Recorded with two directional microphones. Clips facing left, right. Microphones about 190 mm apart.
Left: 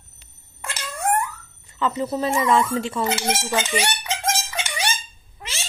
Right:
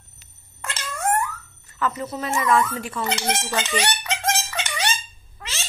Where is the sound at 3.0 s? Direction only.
5° left (ahead or behind).